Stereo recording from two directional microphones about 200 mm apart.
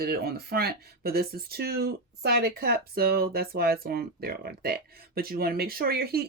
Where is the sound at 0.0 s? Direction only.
50° right (ahead or behind).